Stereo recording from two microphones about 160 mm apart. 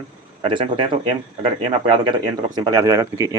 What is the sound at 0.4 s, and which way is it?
Speech, 35° right (ahead or behind).